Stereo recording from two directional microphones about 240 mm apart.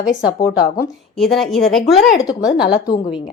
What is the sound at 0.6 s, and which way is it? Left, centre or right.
Speech, left.